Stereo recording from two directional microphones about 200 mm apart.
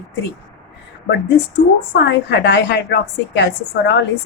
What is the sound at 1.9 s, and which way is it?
A woman's voice, 60° left (ahead or behind).